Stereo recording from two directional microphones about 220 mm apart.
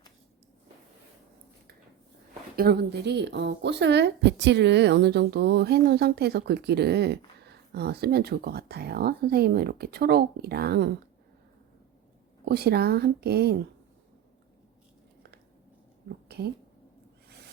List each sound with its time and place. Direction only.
2.6 s speech: 45° right (ahead or behind)
12.5 s speech: 45° right (ahead or behind)
16.0 s a sound: 45° right (ahead or behind)